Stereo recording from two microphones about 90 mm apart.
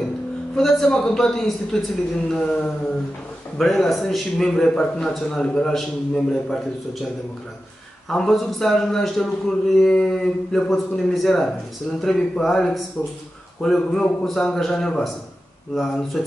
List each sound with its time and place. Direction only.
0.6 s a man's voice: 5° left (ahead or behind)
8.1 s a man's voice: 5° left (ahead or behind)
9.8 s mantra: 5° left (ahead or behind)
11.2 s a man's voice: 5° left (ahead or behind)